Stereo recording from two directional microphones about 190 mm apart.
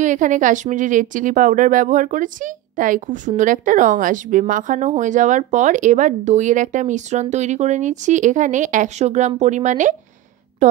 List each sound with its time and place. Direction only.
0.0 s a woman's voice: 40° right (ahead or behind)